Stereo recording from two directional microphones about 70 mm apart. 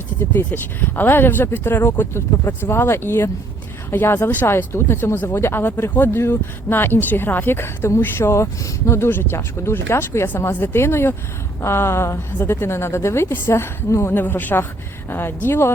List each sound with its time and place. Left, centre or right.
0.3 s speech: left
14.2 s speech: left